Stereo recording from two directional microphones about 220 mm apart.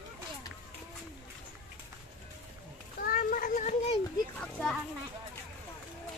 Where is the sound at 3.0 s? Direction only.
40° left (ahead or behind).